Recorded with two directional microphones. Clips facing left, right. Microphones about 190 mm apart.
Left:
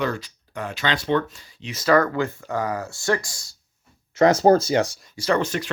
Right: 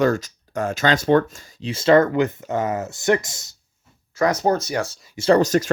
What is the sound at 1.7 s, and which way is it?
Speech, 25° right (ahead or behind).